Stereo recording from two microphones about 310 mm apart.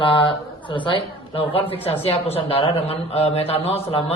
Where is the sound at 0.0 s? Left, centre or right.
Centre.